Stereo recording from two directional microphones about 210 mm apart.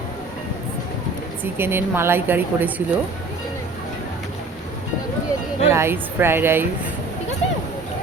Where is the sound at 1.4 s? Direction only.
10° right (ahead or behind).